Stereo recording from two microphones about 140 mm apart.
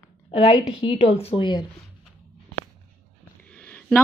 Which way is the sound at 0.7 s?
50° left (ahead or behind).